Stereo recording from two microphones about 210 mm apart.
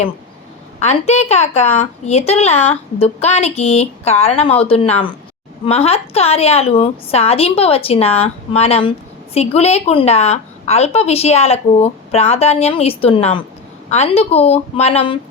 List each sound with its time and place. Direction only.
0.8 s a woman's voice: 30° left (ahead or behind)